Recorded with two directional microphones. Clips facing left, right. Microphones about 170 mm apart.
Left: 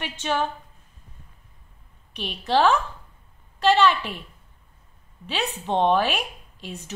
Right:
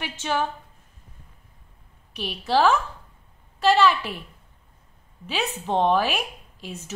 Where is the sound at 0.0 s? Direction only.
5° right (ahead or behind).